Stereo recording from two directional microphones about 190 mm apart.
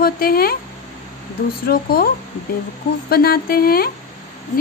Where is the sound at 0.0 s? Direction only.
55° left (ahead or behind).